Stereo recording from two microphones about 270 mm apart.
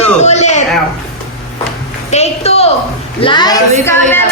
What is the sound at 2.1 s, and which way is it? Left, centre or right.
A woman's voice, left.